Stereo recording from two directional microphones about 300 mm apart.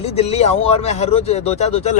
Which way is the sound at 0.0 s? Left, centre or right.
Left.